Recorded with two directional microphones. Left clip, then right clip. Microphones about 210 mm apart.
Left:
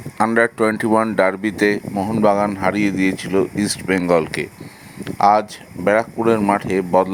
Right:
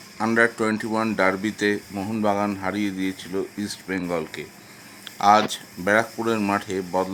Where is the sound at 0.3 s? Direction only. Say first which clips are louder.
Left 2 dB; 35° left (ahead or behind).